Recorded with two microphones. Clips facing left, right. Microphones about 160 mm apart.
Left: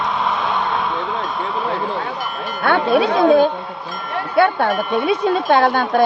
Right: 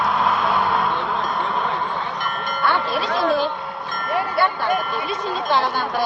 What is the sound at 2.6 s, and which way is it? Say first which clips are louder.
A woman's voice: left 7 dB; 60° left (ahead or behind).